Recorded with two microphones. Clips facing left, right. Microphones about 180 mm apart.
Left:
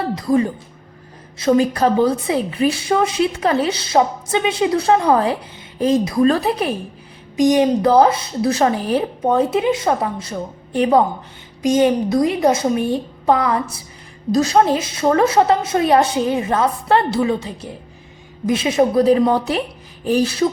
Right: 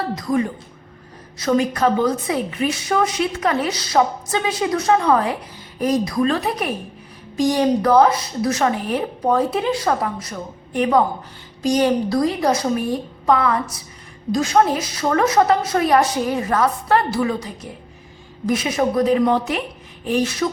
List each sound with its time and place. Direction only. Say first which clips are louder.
0.2 s a woman's voice: left 5 dB; 30° left (ahead or behind)
7.3 s a woman's voice: left 3 dB; 20° left (ahead or behind)